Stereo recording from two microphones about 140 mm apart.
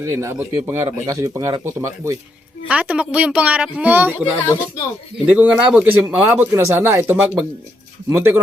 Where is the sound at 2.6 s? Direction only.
10° right (ahead or behind).